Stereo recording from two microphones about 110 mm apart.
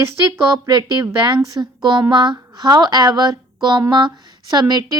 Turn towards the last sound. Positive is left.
turn(degrees=-40)  # may be behind; listen again after turning